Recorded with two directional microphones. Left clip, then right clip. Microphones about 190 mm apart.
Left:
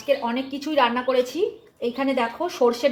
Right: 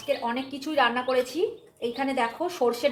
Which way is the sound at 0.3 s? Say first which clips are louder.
Left 3 dB; 40° left (ahead or behind).